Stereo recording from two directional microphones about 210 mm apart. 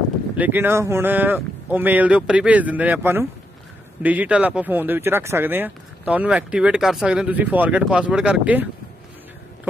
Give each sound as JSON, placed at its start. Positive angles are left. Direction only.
{"t": 0.4, "sound": "speech", "side_deg": -10}